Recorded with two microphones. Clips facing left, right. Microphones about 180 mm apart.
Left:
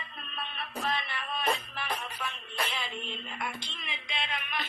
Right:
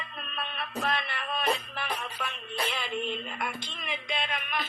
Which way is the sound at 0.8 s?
60° right (ahead or behind).